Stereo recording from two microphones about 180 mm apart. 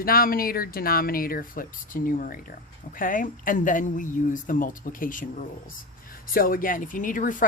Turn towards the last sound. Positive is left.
turn(degrees=45)  # may be behind; listen again after turning